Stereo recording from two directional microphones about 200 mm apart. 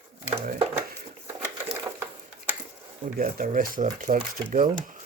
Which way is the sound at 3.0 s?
45° right (ahead or behind).